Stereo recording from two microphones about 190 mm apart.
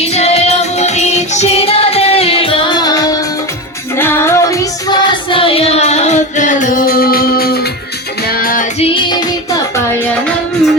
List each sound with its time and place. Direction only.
0.1 s music: 35° left (ahead or behind); by 8.6 s 50° left (ahead or behind)
8.8 s music: 25° left (ahead or behind)